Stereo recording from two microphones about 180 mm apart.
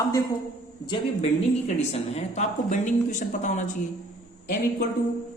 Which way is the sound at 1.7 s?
35° left (ahead or behind).